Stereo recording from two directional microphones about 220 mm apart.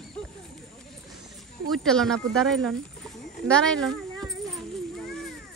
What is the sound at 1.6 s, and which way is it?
Speech, centre (ahead or behind).